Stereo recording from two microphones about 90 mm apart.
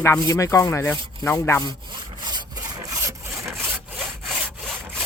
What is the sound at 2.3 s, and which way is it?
Rub, 50° right (ahead or behind).